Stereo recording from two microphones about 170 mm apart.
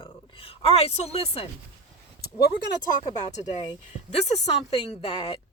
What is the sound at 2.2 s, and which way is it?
Speech, 70° left (ahead or behind).